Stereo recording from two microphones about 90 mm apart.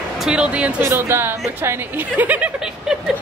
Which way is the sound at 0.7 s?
25° right (ahead or behind).